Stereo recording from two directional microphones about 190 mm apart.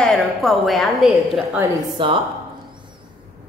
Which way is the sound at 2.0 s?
25° right (ahead or behind).